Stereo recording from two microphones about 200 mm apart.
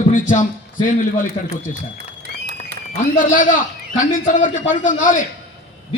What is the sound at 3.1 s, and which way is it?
A man's voice, 40° left (ahead or behind).